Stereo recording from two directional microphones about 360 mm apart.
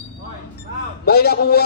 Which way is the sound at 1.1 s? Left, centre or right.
Left.